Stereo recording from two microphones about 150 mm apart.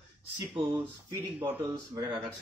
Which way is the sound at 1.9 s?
30° right (ahead or behind).